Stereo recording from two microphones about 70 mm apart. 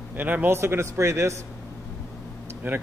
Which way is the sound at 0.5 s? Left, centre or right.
Right.